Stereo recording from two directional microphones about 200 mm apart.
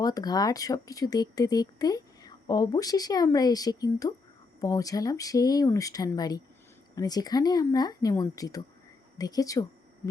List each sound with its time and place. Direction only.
0.0 s speech: 20° left (ahead or behind)